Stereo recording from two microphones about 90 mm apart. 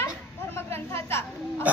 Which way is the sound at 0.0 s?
30° left (ahead or behind).